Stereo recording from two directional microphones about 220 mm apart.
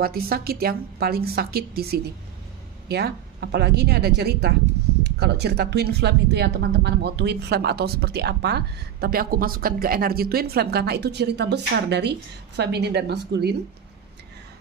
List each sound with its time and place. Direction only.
0.0 s speech: 45° right (ahead or behind)